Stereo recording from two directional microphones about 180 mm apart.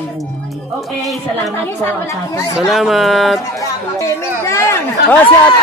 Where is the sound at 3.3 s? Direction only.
15° left (ahead or behind).